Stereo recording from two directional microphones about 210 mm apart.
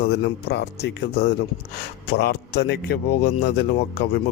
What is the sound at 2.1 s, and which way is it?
Speech, 55° left (ahead or behind).